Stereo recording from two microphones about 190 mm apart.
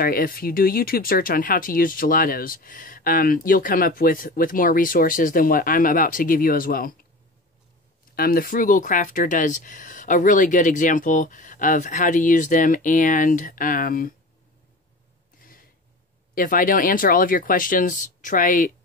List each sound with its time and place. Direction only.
0.0 s speech: 50° left (ahead or behind)
8.2 s speech: 50° left (ahead or behind)
16.3 s speech: 45° left (ahead or behind)